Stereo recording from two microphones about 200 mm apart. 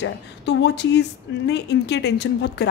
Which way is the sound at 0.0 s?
60° left (ahead or behind).